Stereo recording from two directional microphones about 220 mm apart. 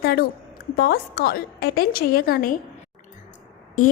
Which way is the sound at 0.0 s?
45° left (ahead or behind).